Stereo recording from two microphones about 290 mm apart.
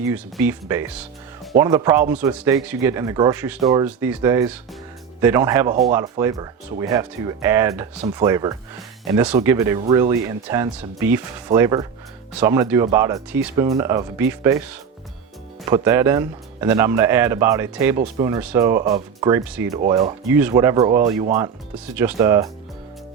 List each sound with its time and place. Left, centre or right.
0.0 s speech: centre
19.9 s speech: centre
20.3 s speech: centre